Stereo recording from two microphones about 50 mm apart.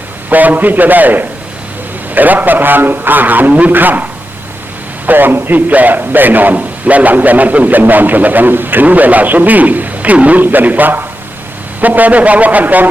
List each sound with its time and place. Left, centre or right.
0.3 s a man's voice: right
5.0 s a man's voice: right